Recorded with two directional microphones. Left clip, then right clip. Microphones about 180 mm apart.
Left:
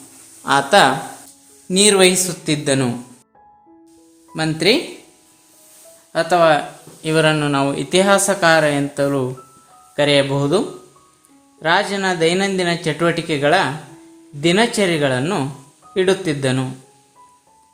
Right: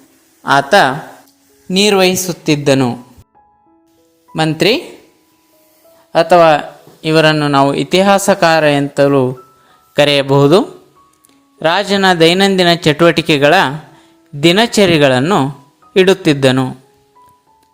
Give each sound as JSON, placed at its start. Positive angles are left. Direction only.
{"t": 0.4, "sound": "speech", "side_deg": -25}
{"t": 4.4, "sound": "speech", "side_deg": -40}
{"t": 6.1, "sound": "speech", "side_deg": -40}
{"t": 11.6, "sound": "speech", "side_deg": -40}
{"t": 16.0, "sound": "speech", "side_deg": -35}